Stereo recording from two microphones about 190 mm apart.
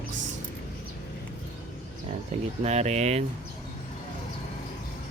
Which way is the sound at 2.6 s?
35° right (ahead or behind).